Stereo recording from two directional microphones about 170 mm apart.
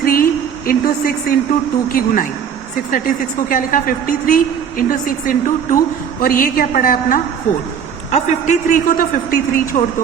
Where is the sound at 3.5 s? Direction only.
55° left (ahead or behind).